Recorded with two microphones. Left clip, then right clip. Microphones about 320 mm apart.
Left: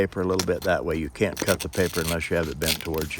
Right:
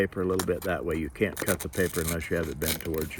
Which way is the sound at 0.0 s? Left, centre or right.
Left.